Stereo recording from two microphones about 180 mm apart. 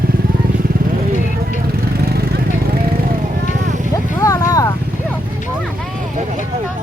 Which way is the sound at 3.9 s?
20° left (ahead or behind).